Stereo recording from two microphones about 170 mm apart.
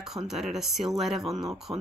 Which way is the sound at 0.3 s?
Centre (ahead or behind).